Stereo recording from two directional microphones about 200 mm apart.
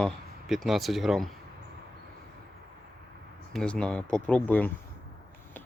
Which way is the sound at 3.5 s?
5° left (ahead or behind).